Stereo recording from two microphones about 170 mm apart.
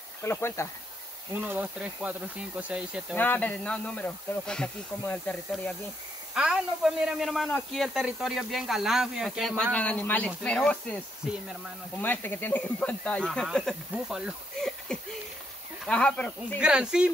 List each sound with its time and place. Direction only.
0.2 s speech: 15° left (ahead or behind)
1.3 s speech: 10° right (ahead or behind)
3.2 s speech: 10° left (ahead or behind)
6.3 s a man's voice: 5° right (ahead or behind)
12.0 s a man's voice: 10° left (ahead or behind)
16.5 s a man's voice: 5° right (ahead or behind)